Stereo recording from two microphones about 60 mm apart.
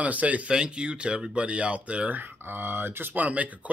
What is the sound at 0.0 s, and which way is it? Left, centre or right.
Speech, right.